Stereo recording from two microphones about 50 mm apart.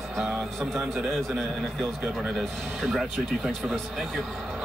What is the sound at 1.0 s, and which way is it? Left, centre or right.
Speech, centre.